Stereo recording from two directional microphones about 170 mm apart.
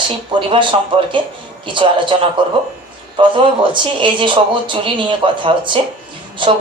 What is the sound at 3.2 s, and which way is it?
Speech, 30° right (ahead or behind).